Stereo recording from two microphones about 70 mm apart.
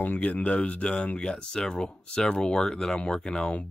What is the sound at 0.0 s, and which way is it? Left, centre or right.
Speech, left.